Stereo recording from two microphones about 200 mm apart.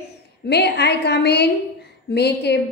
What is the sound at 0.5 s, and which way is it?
A woman's voice, 55° left (ahead or behind).